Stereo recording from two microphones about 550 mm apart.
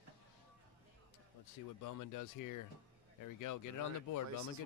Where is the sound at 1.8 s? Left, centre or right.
Left.